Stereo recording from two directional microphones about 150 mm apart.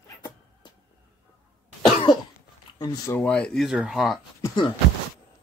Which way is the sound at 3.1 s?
10° left (ahead or behind).